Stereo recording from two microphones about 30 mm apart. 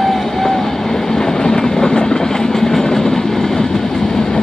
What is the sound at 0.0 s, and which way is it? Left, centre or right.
Train, centre.